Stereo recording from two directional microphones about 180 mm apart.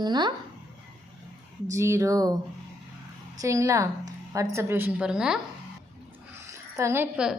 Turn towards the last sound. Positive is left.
turn(degrees=-10)  # may be behind; listen again after turning